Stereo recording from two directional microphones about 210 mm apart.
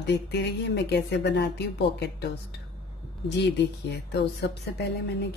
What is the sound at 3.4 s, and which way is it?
A woman's voice, 55° left (ahead or behind).